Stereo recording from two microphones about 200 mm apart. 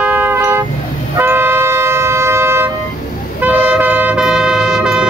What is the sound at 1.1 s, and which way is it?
Vehicle, 10° right (ahead or behind).